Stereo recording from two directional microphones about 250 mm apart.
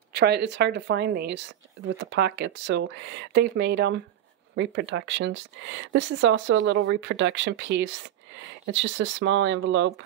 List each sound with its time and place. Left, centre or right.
0.1 s a woman's voice: right